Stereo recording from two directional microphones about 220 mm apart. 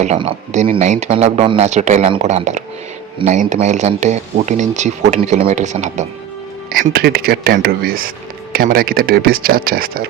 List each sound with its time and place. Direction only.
0.0 s speech: 30° right (ahead or behind)